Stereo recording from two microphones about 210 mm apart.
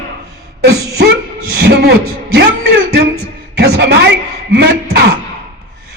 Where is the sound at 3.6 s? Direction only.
50° right (ahead or behind).